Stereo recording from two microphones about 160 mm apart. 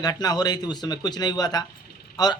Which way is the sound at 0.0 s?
25° left (ahead or behind).